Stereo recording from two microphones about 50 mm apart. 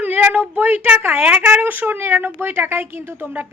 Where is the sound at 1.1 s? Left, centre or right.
Right.